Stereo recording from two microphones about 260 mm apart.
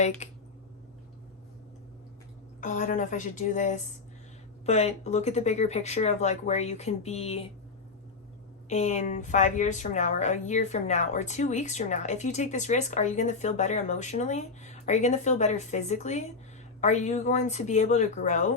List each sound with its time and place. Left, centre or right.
0.2 s speech: left
2.6 s a woman's voice: left
8.7 s a woman's voice: left